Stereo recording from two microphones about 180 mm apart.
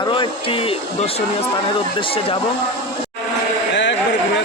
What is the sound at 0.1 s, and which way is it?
Speech, 30° left (ahead or behind).